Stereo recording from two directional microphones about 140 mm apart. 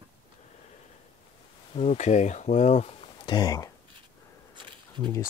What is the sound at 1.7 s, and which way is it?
Speech, 55° left (ahead or behind).